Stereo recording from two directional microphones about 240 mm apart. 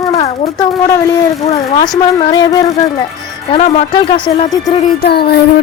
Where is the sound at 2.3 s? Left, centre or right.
Centre.